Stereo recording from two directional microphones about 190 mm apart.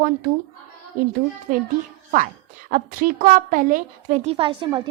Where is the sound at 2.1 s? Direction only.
40° right (ahead or behind); by 4.8 s 25° right (ahead or behind).